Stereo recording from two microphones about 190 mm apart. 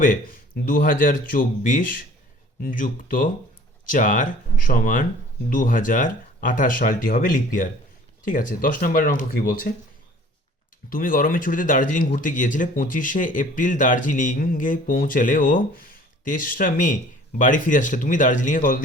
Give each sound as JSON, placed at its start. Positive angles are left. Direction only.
{"t": 0.0, "sound": "speech", "side_deg": 45}
{"t": 10.8, "sound": "speech", "side_deg": 50}